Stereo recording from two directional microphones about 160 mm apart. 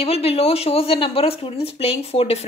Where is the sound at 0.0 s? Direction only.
40° left (ahead or behind).